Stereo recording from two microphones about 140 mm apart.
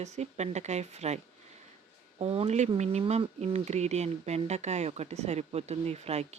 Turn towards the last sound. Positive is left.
turn(degrees=-50)  # may be behind; listen again after turning